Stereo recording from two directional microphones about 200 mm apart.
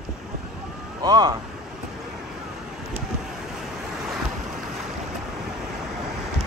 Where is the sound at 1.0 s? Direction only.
20° right (ahead or behind).